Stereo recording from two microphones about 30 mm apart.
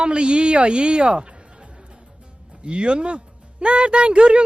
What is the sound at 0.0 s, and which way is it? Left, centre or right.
Speech, right.